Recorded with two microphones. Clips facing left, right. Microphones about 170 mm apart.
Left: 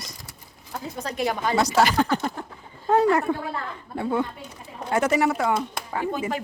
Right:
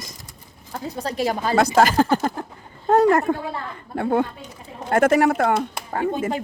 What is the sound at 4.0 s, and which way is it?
A woman's voice, 55° right (ahead or behind).